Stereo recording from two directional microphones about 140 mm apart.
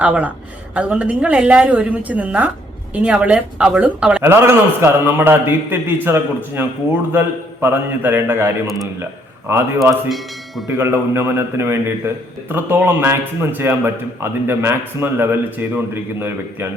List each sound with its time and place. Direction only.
0.0 s a man's voice: 10° right (ahead or behind)
8.6 s a man's voice: centre (ahead or behind)
9.5 s a man's voice: 20° right (ahead or behind)